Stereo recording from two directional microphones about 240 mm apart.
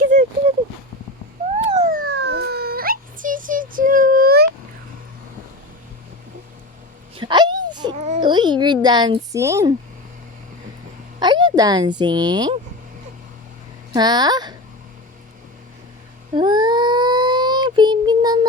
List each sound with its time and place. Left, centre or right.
1.7 s emergency vehicle: right
7.2 s a sound: centre
7.9 s a sound: right; by 9.7 s centre
11.2 s speech: centre
13.9 s speech: centre
16.3 s child singing: centre